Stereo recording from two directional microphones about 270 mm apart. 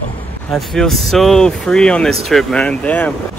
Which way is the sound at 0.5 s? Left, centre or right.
Centre.